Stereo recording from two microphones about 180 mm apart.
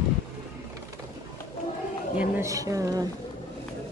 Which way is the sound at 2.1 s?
15° right (ahead or behind).